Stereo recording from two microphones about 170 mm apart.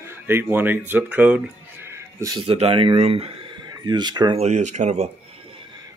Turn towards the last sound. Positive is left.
turn(degrees=-40)  # may be behind; listen again after turning